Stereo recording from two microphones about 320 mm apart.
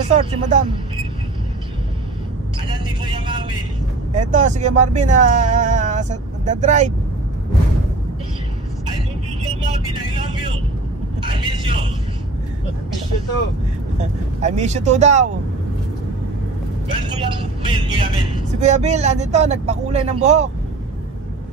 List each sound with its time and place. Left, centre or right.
0.1 s speech: right
2.7 s vehicle: centre
4.1 s speech: right
11.2 s vehicle: centre
13.9 s speech: right
17.1 s speech: centre